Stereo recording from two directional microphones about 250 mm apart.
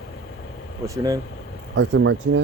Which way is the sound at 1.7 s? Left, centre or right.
Right.